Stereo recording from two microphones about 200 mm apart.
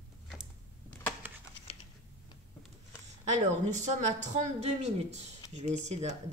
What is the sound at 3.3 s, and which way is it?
Speech, 35° right (ahead or behind).